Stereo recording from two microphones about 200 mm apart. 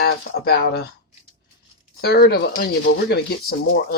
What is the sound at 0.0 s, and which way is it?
Speech, 55° left (ahead or behind).